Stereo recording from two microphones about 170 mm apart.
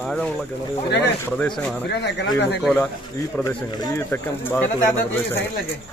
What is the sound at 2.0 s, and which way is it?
Speech, 80° left.